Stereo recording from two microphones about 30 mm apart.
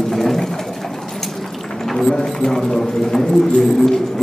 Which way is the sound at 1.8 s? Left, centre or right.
Centre.